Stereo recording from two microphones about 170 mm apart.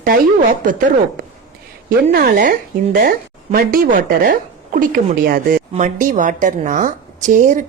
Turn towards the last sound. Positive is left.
turn(degrees=-50)  # may be behind; listen again after turning